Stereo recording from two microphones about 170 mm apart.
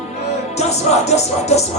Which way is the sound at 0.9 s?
40° left (ahead or behind).